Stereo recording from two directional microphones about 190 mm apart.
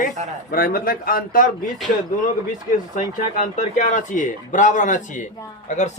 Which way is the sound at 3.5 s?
40° left (ahead or behind).